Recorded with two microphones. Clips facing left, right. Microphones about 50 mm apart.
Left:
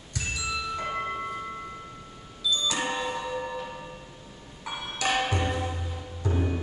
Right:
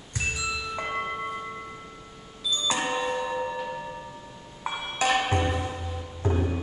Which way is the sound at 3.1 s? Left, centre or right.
Centre.